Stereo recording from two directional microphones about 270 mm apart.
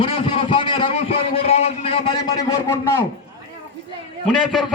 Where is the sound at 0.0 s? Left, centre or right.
Centre.